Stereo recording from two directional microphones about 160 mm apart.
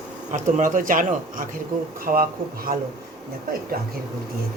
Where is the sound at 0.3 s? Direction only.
50° right (ahead or behind).